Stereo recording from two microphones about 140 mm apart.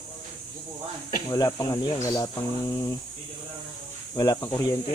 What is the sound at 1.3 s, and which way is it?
Speech, 25° left (ahead or behind).